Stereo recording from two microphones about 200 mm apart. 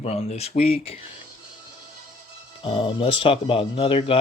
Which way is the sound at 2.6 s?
25° left (ahead or behind).